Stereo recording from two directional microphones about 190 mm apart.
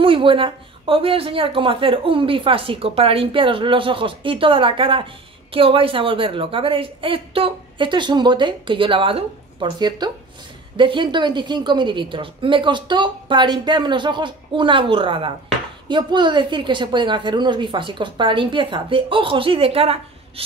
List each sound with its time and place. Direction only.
0.0 s speech: 30° right (ahead or behind)